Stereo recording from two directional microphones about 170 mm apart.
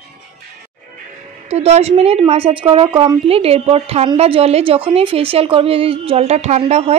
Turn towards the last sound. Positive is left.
turn(degrees=-35)  # may be behind; listen again after turning